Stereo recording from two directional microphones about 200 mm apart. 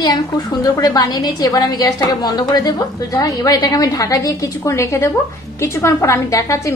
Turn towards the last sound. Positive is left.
turn(degrees=15)  # may be behind; listen again after turning